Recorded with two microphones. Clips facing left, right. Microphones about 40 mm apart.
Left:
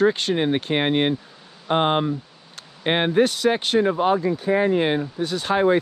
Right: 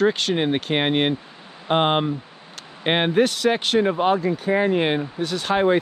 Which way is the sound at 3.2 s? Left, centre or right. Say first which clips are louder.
Even; right.